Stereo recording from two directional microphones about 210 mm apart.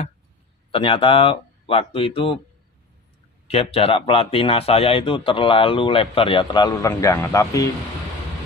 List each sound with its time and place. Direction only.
0.7 s a man's voice: 25° left (ahead or behind)
3.4 s a man's voice: 30° left (ahead or behind)